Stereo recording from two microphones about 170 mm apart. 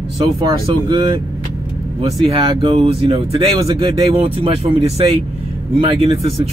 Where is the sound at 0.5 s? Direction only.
25° right (ahead or behind).